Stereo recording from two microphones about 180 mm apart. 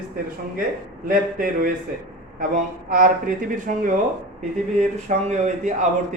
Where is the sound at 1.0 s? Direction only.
50° right (ahead or behind).